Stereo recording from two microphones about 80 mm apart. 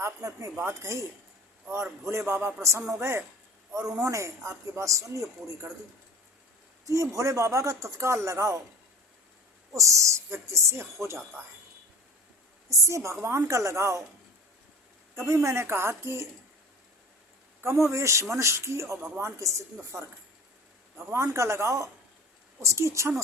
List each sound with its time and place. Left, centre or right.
0.0 s speech: right
6.8 s speech: right
9.7 s speech: right
12.7 s speech: right
15.2 s speech: right
17.6 s speech: right
21.1 s speech: right